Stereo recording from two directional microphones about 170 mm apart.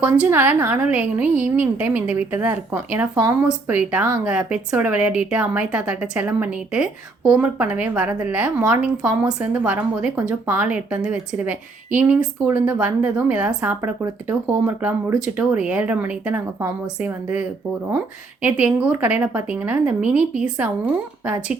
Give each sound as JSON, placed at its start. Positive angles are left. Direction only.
{"t": 0.0, "sound": "speech", "side_deg": -10}
{"t": 18.4, "sound": "speech", "side_deg": -5}